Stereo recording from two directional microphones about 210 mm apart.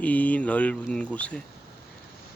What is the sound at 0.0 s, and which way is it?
Speech, 5° left (ahead or behind).